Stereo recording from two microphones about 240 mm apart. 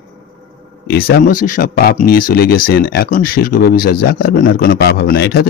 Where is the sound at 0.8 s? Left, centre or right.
Left.